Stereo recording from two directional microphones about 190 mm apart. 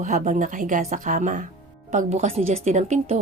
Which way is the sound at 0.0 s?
40° right (ahead or behind).